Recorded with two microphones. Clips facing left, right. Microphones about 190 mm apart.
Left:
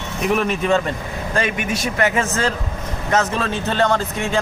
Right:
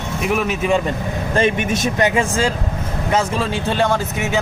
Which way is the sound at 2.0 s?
15° right (ahead or behind).